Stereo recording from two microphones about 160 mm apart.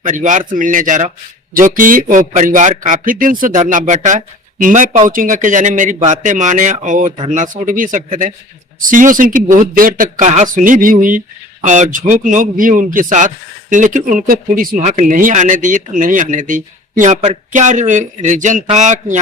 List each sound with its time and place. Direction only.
0.0 s a man's voice: 50° right (ahead or behind)